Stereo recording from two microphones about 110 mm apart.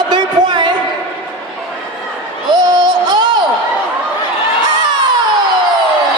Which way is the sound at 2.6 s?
40° right (ahead or behind).